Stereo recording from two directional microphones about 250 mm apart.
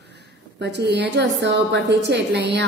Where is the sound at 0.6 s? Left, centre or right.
Right.